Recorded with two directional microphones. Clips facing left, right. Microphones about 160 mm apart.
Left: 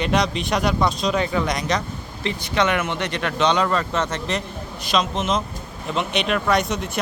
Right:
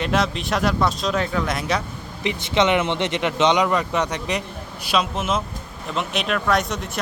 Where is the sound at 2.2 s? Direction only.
20° right (ahead or behind).